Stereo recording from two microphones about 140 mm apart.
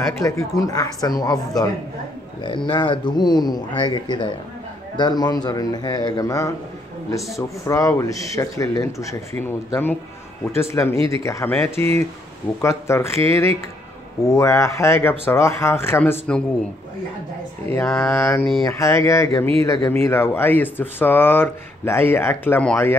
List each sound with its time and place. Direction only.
0.2 s speech: 25° left (ahead or behind); by 16.4 s 10° left (ahead or behind)
17.8 s mantra: 5° left (ahead or behind)
18.1 s speech: 15° left (ahead or behind)